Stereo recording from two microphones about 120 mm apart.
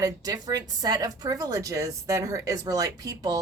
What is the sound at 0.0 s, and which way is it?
A woman's voice, 30° right (ahead or behind).